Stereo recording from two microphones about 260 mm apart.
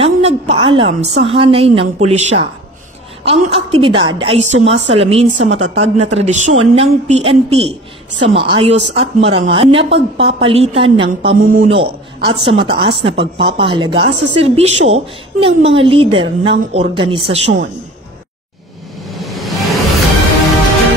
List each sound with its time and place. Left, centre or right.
0.0 s a woman's voice: right
11.3 s a man's voice: right
19.0 s music: centre